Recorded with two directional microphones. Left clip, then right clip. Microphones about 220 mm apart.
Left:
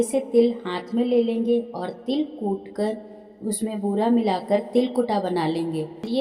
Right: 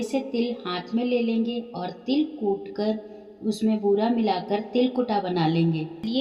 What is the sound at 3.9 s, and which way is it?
A woman's voice, 25° left (ahead or behind).